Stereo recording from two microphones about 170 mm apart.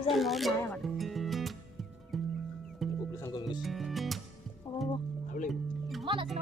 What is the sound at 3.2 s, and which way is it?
Music, 25° left (ahead or behind).